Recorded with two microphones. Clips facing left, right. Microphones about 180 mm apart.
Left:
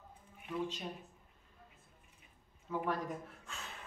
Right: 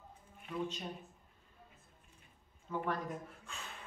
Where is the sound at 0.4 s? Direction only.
5° left (ahead or behind).